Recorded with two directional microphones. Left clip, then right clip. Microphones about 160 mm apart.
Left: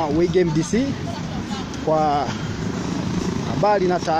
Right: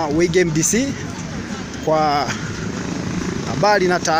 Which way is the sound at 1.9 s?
10° right (ahead or behind).